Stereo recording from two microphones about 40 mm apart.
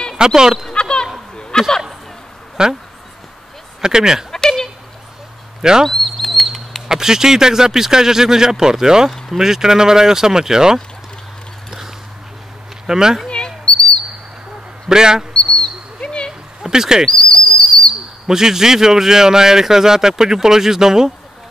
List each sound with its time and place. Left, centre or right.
0.2 s a man's voice: centre
0.7 s a sound: left
2.6 s speech: centre
3.8 s a man's voice: centre
4.3 s a sound: centre
5.6 s speech: centre
5.9 s a man's voice: centre
12.8 s speech: centre
13.3 s a sound: left
14.9 s a man's voice: centre
15.3 s speech: left
16.6 s a man's voice: centre
17.1 s bird: left
18.2 s a man's voice: centre